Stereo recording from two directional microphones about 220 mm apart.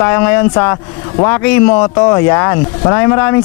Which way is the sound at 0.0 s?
10° left (ahead or behind).